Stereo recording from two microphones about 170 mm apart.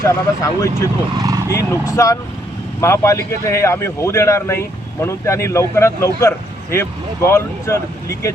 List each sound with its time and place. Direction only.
0.0 s speech: 20° left (ahead or behind)
1.2 s vehicle: 20° right (ahead or behind)
1.5 s a man's voice: 15° left (ahead or behind)